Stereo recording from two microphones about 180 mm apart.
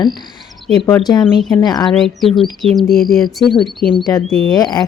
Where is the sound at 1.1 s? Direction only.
25° left (ahead or behind).